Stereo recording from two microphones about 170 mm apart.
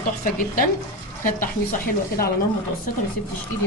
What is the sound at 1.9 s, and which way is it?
Speech, 60° left (ahead or behind).